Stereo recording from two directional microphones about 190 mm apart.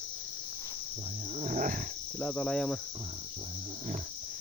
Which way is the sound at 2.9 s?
30° right (ahead or behind).